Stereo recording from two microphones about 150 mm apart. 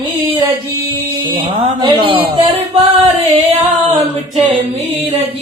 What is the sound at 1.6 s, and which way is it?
Music, 40° right (ahead or behind).